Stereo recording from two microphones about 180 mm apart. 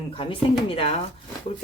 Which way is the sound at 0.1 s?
30° left (ahead or behind).